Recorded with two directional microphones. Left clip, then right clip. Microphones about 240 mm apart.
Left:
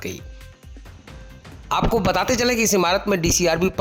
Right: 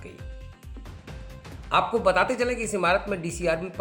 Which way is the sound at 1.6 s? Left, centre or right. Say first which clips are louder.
Left 2 dB; left.